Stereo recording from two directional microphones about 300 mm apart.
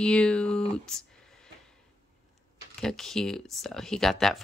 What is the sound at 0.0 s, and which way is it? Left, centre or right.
Speech, centre.